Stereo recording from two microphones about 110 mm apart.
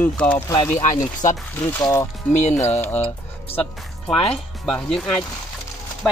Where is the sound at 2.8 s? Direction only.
15° left (ahead or behind).